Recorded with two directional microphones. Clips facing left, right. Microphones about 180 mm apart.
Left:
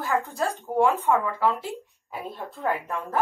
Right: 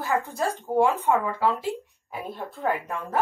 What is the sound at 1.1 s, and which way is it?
Speech, 15° right (ahead or behind).